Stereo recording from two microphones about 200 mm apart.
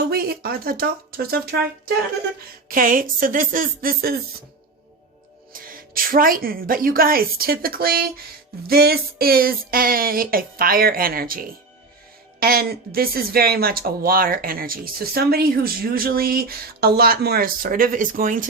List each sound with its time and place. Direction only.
0.1 s speech: 50° right (ahead or behind)
2.6 s speech: 45° right (ahead or behind)
5.5 s speech: 45° right (ahead or behind)